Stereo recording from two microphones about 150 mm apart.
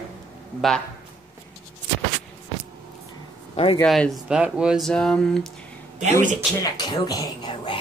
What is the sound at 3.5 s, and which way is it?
Speech, 40° left (ahead or behind).